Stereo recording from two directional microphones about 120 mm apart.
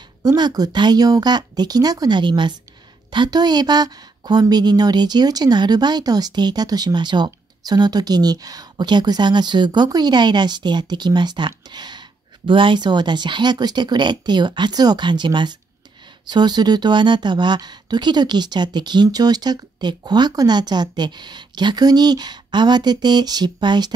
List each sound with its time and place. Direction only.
0.2 s a woman's voice: 30° right (ahead or behind)